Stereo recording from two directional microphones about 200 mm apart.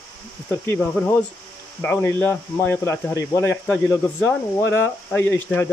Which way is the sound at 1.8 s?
10° left (ahead or behind).